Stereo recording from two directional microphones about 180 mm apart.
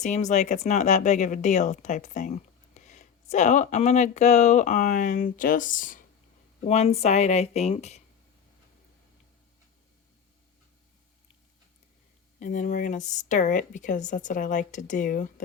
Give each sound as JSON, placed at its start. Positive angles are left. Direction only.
{"t": 0.0, "sound": "speech", "side_deg": 40}
{"t": 6.7, "sound": "speech", "side_deg": 35}
{"t": 12.4, "sound": "speech", "side_deg": 45}